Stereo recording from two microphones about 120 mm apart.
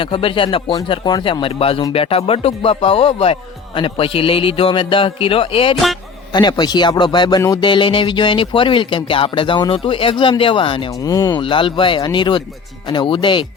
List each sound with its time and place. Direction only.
0.0 s speech: 50° left (ahead or behind)
6.3 s speech: 35° left (ahead or behind)
11.0 s speech: 25° left (ahead or behind)
11.3 s speech: 45° left (ahead or behind)